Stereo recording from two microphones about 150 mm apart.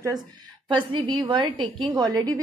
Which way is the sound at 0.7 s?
30° right (ahead or behind).